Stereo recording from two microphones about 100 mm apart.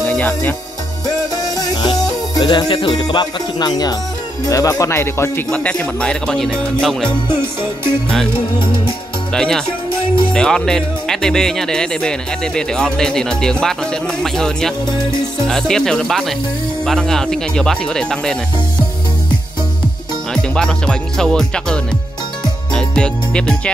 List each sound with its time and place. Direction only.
0.0 s speech: 15° left (ahead or behind)
1.0 s music: 40° left (ahead or behind)
4.5 s speech: 35° left (ahead or behind)
5.5 s speech: 10° left (ahead or behind)
9.3 s speech: 5° left (ahead or behind)
20.5 s speech: 5° left (ahead or behind)
22.7 s music: 10° left (ahead or behind)